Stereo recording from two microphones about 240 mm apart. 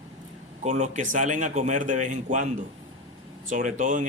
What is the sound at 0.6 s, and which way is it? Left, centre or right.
A man's voice, right.